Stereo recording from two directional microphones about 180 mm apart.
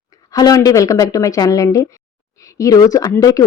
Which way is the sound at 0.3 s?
20° left (ahead or behind).